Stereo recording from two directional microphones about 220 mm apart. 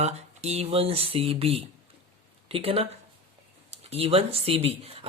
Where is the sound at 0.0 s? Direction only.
30° right (ahead or behind).